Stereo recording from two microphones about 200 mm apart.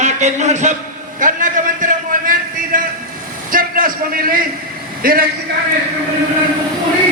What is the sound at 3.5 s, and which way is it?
A man's voice, 45° right (ahead or behind).